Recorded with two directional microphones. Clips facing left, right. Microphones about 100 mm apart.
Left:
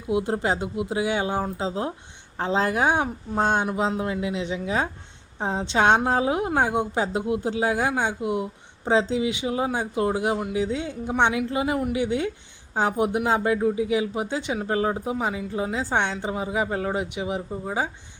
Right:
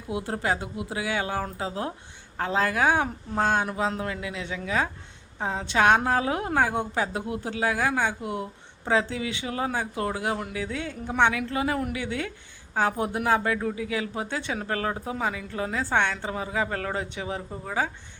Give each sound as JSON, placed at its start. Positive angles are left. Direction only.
{"t": 0.1, "sound": "a woman's voice", "side_deg": 20}